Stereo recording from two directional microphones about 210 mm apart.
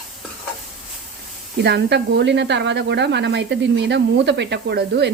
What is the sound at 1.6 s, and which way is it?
A woman's voice, 55° right (ahead or behind).